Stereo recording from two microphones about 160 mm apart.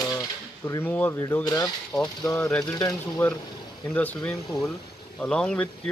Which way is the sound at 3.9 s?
10° left (ahead or behind).